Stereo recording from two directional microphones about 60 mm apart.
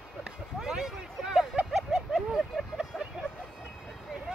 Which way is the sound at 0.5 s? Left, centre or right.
Centre.